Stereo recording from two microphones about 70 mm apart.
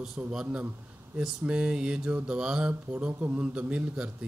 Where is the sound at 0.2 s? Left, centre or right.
Centre.